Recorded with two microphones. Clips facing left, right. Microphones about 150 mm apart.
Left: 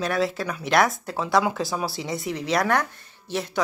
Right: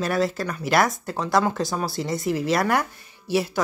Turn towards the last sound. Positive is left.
turn(degrees=-5)  # may be behind; listen again after turning